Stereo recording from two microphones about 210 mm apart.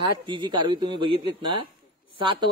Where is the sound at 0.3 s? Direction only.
20° right (ahead or behind).